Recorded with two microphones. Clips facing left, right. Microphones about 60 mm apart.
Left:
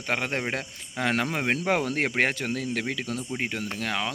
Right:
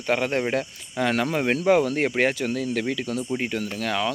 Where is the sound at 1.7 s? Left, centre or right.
Left.